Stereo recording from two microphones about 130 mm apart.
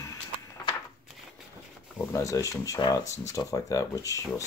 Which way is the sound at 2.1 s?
25° left (ahead or behind).